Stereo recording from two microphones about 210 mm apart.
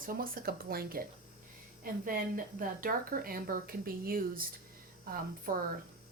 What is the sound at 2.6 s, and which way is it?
Speech, 40° right (ahead or behind).